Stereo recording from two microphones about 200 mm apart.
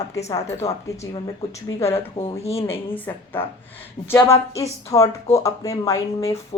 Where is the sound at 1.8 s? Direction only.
30° left (ahead or behind).